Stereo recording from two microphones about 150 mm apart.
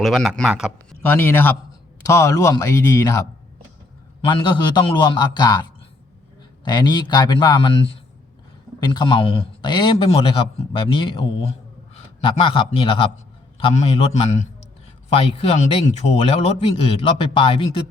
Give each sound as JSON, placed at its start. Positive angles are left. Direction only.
{"t": 0.0, "sound": "a man's voice", "side_deg": 0}
{"t": 1.0, "sound": "a man's voice", "side_deg": 10}
{"t": 6.7, "sound": "a man's voice", "side_deg": 30}
{"t": 8.8, "sound": "a man's voice", "side_deg": 30}